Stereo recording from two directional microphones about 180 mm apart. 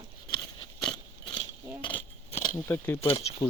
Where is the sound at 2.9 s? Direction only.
30° left (ahead or behind).